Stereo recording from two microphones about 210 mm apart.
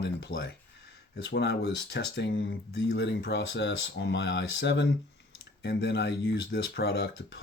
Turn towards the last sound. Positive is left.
turn(degrees=50)  # may be behind; listen again after turning